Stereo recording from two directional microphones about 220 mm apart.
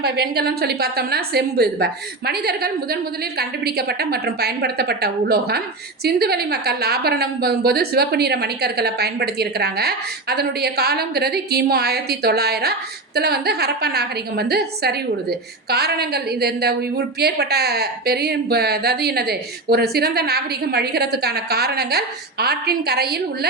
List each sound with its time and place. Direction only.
0.0 s a woman's voice: 45° right (ahead or behind)